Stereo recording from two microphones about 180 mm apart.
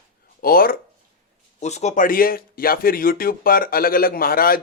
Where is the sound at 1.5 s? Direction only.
40° left (ahead or behind).